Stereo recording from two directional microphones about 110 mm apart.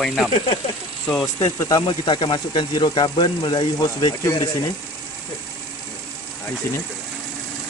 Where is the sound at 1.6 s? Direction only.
35° left (ahead or behind).